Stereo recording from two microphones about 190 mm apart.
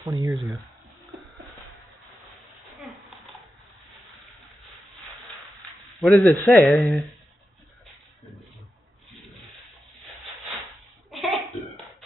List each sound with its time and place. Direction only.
0.0 s speech: 20° right (ahead or behind)
0.3 s speech: centre (ahead or behind)
5.9 s speech: centre (ahead or behind)
11.1 s a sound: centre (ahead or behind)